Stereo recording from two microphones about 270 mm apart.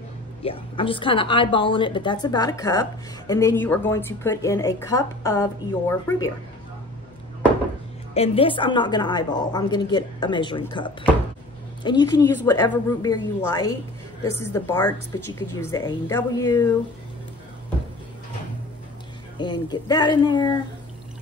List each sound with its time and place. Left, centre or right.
0.4 s a woman's voice: centre
8.1 s a woman's voice: left
19.3 s a woman's voice: centre